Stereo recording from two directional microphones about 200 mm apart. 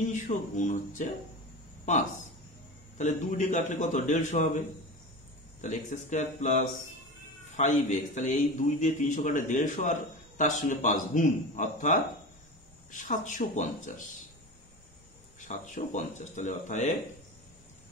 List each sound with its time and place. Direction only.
0.1 s a man's voice: 40° left (ahead or behind)
3.0 s a man's voice: 35° left (ahead or behind)
5.6 s a man's voice: 40° left (ahead or behind)
15.4 s a man's voice: 40° left (ahead or behind)